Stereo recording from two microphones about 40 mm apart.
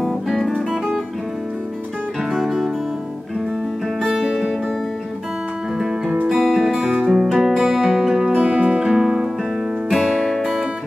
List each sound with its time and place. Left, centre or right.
2.3 s music: centre
4.1 s music: centre
5.8 s music: centre
8.4 s music: right
8.7 s music: centre
9.9 s music: centre